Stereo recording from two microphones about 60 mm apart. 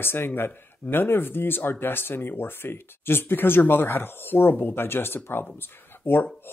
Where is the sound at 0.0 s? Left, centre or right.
Left.